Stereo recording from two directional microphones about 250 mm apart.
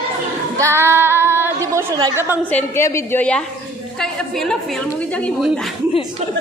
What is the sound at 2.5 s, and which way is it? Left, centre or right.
A woman's voice, centre.